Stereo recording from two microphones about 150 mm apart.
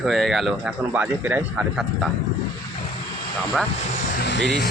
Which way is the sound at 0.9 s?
10° right (ahead or behind).